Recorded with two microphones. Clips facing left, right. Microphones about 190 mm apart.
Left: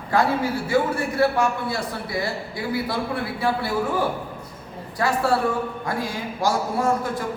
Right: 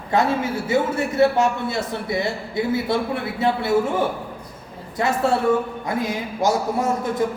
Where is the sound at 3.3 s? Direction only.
25° right (ahead or behind).